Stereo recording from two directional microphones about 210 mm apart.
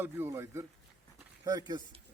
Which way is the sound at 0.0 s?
10° right (ahead or behind).